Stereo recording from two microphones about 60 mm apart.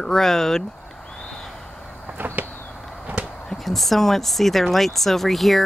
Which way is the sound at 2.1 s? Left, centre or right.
Right.